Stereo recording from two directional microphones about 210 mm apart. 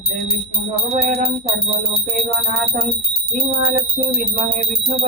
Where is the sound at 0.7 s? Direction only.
45° right (ahead or behind).